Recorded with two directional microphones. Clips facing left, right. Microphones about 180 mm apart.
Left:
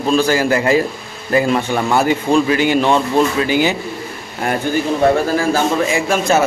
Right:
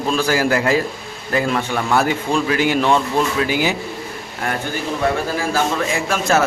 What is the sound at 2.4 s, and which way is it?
A man's voice, centre (ahead or behind).